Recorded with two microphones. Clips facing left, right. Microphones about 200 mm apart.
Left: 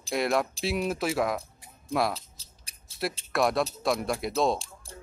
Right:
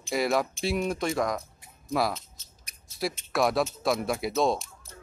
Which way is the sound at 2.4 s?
30° left (ahead or behind).